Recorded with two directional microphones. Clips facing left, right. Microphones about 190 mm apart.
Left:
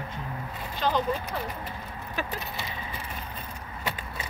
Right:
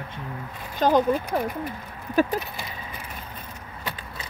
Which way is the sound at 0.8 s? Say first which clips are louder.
Right 7 dB; 45° right (ahead or behind).